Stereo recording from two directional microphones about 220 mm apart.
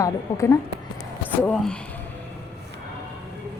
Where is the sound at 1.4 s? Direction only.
5° left (ahead or behind).